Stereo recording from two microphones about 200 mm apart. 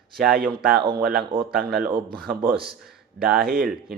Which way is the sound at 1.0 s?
50° right (ahead or behind).